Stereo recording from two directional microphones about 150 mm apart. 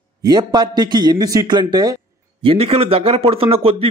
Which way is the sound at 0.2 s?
25° right (ahead or behind).